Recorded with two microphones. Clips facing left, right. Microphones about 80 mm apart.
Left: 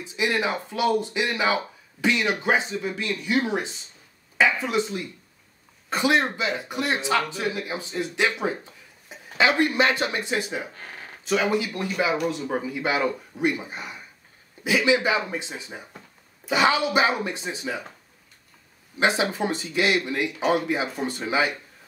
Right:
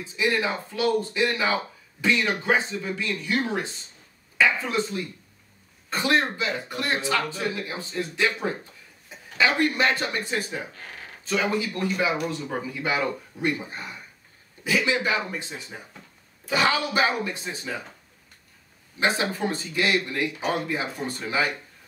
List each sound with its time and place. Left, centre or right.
0.1 s speech: centre
11.9 s speech: centre
18.9 s speech: centre